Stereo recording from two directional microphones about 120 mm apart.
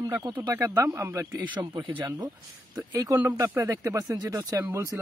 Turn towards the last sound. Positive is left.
turn(degrees=-25)  # may be behind; listen again after turning